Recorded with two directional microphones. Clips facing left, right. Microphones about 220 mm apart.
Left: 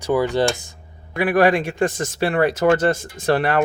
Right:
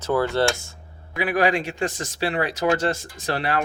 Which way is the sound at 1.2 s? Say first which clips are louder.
Left 5 dB; 55° left (ahead or behind).